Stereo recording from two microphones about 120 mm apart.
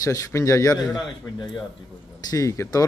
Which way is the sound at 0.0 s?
25° left (ahead or behind).